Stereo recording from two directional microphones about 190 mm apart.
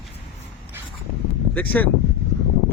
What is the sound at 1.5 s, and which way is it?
Speech, 10° left (ahead or behind).